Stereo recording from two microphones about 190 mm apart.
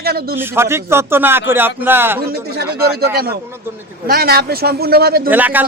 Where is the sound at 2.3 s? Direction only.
55° right (ahead or behind).